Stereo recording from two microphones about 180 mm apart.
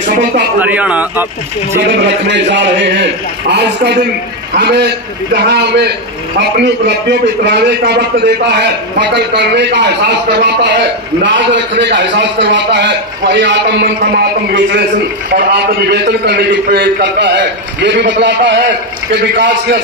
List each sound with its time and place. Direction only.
0.6 s a man's voice: 10° right (ahead or behind)
1.9 s a man's voice: 75° right (ahead or behind)
15.3 s a man's voice: 65° right (ahead or behind); by 19.8 s 85° right